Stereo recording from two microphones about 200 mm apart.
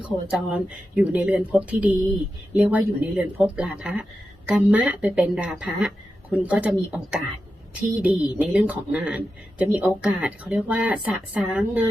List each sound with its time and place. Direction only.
0.0 s a woman's voice: 5° right (ahead or behind)